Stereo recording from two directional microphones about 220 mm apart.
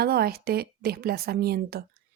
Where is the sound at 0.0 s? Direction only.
45° right (ahead or behind).